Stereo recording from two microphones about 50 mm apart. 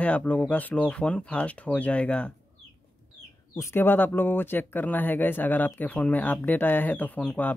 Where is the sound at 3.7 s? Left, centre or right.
Left.